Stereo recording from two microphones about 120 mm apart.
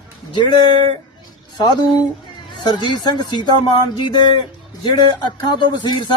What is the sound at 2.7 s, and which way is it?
Speech, 40° left (ahead or behind).